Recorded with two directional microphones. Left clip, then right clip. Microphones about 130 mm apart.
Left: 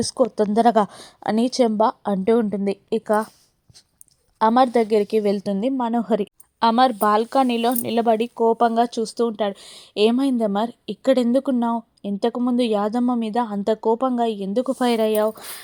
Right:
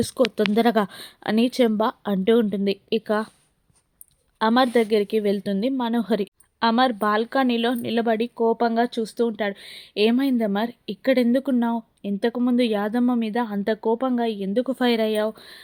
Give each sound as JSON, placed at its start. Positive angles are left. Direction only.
{"t": 0.2, "sound": "speech", "side_deg": -25}
{"t": 0.5, "sound": "a woman's voice", "side_deg": 0}
{"t": 4.4, "sound": "a woman's voice", "side_deg": 0}
{"t": 6.6, "sound": "speech", "side_deg": 15}